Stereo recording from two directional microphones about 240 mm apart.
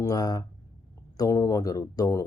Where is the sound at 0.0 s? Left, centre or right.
Centre.